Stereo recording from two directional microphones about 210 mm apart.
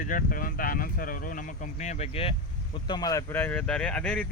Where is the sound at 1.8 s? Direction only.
30° left (ahead or behind).